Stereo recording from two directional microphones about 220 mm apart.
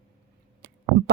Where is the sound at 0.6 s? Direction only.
50° right (ahead or behind).